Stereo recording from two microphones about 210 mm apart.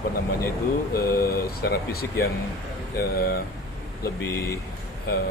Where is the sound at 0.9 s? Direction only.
45° left (ahead or behind).